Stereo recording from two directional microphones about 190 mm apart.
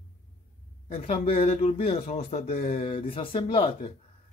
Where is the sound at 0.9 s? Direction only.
35° left (ahead or behind).